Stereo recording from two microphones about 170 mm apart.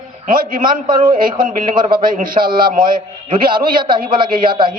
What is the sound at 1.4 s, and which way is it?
Speech, 55° right (ahead or behind).